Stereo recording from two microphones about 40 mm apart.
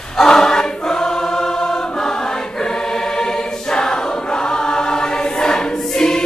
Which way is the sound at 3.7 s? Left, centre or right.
Left.